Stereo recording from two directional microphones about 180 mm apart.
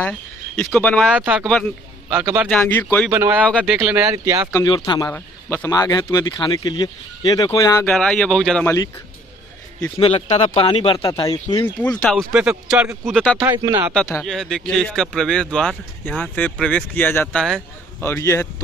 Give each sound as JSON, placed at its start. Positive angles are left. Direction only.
{"t": 0.6, "sound": "speech", "side_deg": 5}
{"t": 1.1, "sound": "speech", "side_deg": -5}
{"t": 2.5, "sound": "speech", "side_deg": 10}
{"t": 3.1, "sound": "speech", "side_deg": -15}
{"t": 4.5, "sound": "speech", "side_deg": 20}
{"t": 5.1, "sound": "speech", "side_deg": 10}
{"t": 7.8, "sound": "speech", "side_deg": 5}
{"t": 9.9, "sound": "speech", "side_deg": 30}
{"t": 11.8, "sound": "speech", "side_deg": 5}
{"t": 13.4, "sound": "speech", "side_deg": -25}
{"t": 14.2, "sound": "speech", "side_deg": 5}
{"t": 18.0, "sound": "speech", "side_deg": 15}